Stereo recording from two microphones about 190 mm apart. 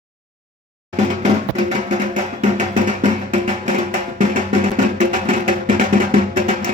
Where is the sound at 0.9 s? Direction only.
40° right (ahead or behind).